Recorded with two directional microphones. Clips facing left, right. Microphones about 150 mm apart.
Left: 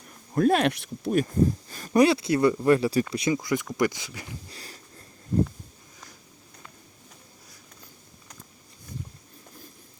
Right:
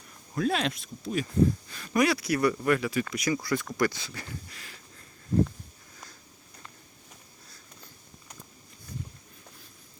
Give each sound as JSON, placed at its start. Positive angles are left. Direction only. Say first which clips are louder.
{"t": 0.3, "sound": "speech", "louder": "left 7 dB", "side_deg": 50}
{"t": 0.7, "sound": "speech", "louder": "left 7 dB", "side_deg": 65}
{"t": 4.4, "sound": "a sound", "louder": "left 4 dB", "side_deg": 35}